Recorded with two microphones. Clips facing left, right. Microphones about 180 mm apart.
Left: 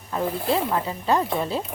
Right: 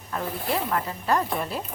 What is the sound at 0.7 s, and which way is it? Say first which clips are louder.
Speech: left 2 dB; 25° left (ahead or behind).